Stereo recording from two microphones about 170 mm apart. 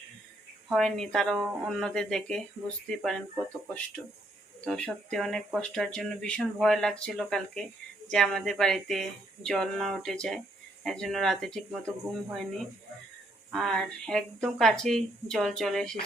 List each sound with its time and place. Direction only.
0.7 s speech: centre (ahead or behind)
4.6 s speech: 5° left (ahead or behind)